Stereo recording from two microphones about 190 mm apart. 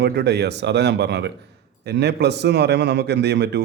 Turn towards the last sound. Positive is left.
turn(degrees=-60)  # may be behind; listen again after turning